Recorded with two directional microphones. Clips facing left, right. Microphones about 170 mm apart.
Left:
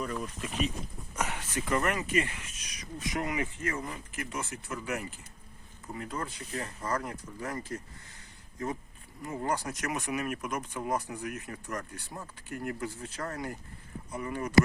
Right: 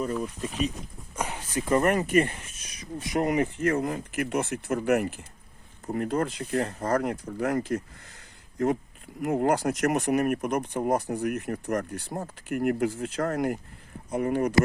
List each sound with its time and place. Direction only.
0.0 s speech: 35° right (ahead or behind)
1.9 s speech: 50° right (ahead or behind)
2.6 s speech: 35° right (ahead or behind)
3.6 s speech: 60° right (ahead or behind)
10.8 s speech: 40° right (ahead or behind)
11.2 s speech: 55° right (ahead or behind)
11.6 s speech: 40° right (ahead or behind)
12.1 s speech: 55° right (ahead or behind); by 13.1 s 80° right
13.2 s speech: 60° right (ahead or behind)